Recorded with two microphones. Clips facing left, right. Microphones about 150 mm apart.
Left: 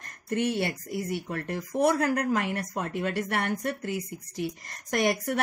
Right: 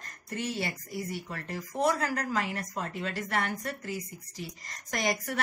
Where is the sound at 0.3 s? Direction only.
60° left (ahead or behind).